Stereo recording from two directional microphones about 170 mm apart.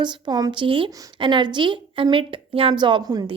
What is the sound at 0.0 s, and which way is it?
A woman's voice, 25° right (ahead or behind).